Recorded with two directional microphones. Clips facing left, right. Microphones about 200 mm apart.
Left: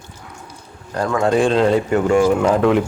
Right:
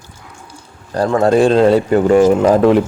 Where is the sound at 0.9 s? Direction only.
35° right (ahead or behind).